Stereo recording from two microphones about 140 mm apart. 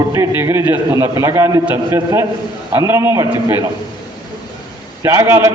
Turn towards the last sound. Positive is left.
turn(degrees=-20)  # may be behind; listen again after turning